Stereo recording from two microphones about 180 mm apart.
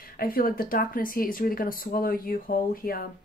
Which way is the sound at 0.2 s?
55° left (ahead or behind).